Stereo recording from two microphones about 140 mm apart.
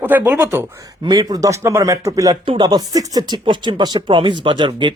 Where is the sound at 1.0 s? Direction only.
30° right (ahead or behind).